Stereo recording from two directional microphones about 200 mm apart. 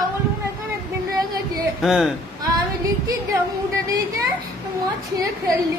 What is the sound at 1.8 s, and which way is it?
Speech, centre (ahead or behind).